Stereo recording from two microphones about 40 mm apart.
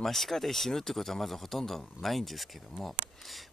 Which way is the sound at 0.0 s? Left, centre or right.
Centre.